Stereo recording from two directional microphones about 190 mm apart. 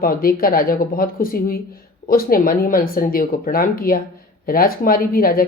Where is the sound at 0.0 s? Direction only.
50° left (ahead or behind).